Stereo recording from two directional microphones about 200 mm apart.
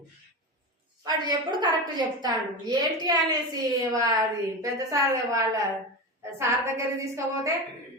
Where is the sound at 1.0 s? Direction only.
20° right (ahead or behind).